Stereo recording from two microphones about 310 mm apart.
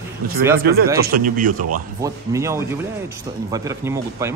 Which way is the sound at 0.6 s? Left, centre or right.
Right.